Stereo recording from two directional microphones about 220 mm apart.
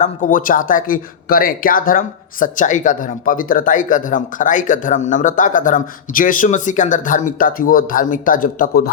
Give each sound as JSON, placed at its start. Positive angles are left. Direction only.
{"t": 0.0, "sound": "speech", "side_deg": 40}